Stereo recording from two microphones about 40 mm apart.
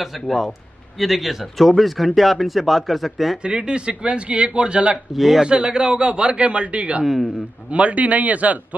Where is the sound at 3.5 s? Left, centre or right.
Right.